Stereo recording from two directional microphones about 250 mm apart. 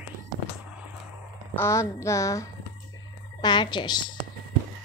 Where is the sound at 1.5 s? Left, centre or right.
Centre.